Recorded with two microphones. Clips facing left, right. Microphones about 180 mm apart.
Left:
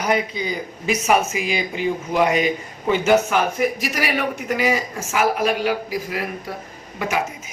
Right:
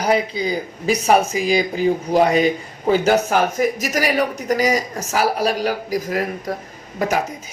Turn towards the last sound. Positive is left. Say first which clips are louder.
# right 3 dB
turn(degrees=-40)  # may be behind; listen again after turning